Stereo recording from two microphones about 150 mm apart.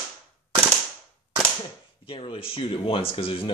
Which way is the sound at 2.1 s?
35° left (ahead or behind).